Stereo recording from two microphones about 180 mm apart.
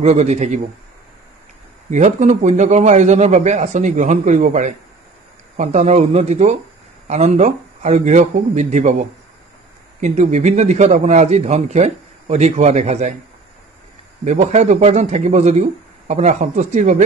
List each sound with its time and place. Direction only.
0.0 s a man's voice: 40° right (ahead or behind)
1.9 s a man's voice: 40° right (ahead or behind)
9.9 s a man's voice: 40° right (ahead or behind)
14.2 s a man's voice: 40° right (ahead or behind)